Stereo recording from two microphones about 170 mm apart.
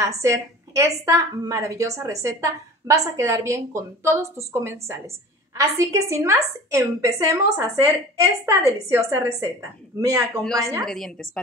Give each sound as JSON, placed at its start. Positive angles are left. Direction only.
{"t": 0.0, "sound": "a woman's voice", "side_deg": -15}
{"t": 10.8, "sound": "a woman's voice", "side_deg": 5}